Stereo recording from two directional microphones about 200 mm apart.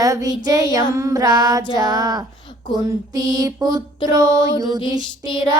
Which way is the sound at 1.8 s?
20° right (ahead or behind).